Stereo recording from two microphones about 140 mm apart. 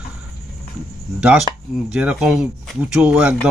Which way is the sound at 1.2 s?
5° right (ahead or behind).